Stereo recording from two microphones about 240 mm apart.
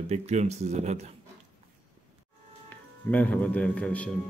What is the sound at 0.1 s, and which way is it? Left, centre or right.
Speech, right.